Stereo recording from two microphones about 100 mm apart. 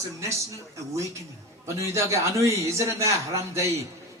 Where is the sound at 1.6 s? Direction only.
30° right (ahead or behind).